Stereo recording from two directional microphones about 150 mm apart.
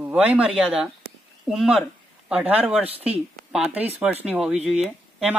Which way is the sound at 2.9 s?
40° right (ahead or behind).